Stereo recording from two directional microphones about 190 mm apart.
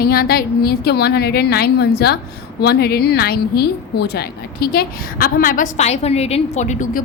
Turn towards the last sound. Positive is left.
turn(degrees=40)  # may be behind; listen again after turning